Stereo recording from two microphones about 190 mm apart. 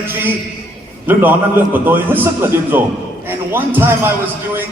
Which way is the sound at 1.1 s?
10° right (ahead or behind).